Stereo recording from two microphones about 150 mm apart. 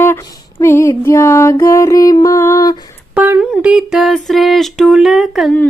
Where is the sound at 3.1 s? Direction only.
10° right (ahead or behind).